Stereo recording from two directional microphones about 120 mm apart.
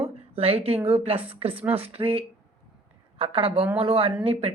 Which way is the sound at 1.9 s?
55° right (ahead or behind).